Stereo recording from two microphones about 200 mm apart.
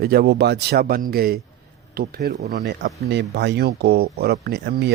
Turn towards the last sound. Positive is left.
turn(degrees=-55)  # may be behind; listen again after turning